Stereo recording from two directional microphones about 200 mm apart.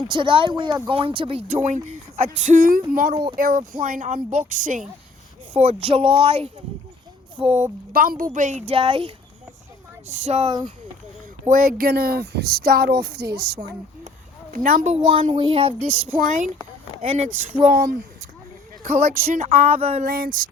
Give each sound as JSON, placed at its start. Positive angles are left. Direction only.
{"t": 0.1, "sound": "speech", "side_deg": -25}
{"t": 7.9, "sound": "speech", "side_deg": -45}
{"t": 10.1, "sound": "speech", "side_deg": -35}
{"t": 11.6, "sound": "speech", "side_deg": -50}
{"t": 14.5, "sound": "speech", "side_deg": -40}
{"t": 15.2, "sound": "speech", "side_deg": -25}
{"t": 15.9, "sound": "speech", "side_deg": -40}
{"t": 17.7, "sound": "speech", "side_deg": -45}
{"t": 18.8, "sound": "speech", "side_deg": -35}
{"t": 20.1, "sound": "speech", "side_deg": -45}